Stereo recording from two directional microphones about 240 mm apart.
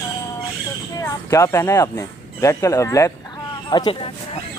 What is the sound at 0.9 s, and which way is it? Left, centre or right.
Speech, centre.